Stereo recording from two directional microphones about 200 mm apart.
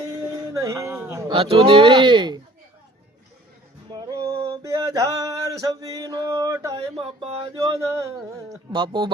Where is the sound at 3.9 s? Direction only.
20° right (ahead or behind).